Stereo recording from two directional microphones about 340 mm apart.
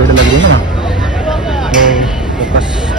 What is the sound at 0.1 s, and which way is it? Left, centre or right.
Speech, right.